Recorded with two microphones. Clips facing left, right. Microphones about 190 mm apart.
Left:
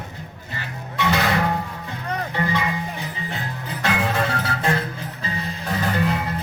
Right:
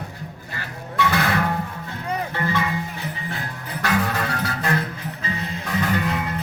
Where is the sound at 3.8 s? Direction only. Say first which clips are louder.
Left 1 dB; 25° left (ahead or behind).